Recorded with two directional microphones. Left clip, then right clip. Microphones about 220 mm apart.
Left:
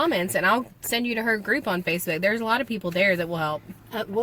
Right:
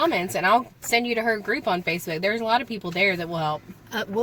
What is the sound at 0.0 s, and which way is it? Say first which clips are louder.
A woman's voice: even; 15° left (ahead or behind).